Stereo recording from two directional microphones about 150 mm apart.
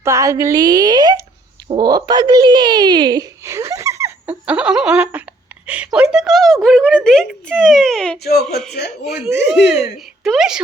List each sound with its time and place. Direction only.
0.0 s a woman's voice: 20° right (ahead or behind); by 8.2 s 5° left (ahead or behind)
8.2 s speech: 90° left
9.0 s a woman's voice: 5° right (ahead or behind)